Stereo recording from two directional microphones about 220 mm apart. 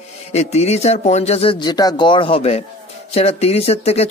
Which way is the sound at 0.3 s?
30° left (ahead or behind).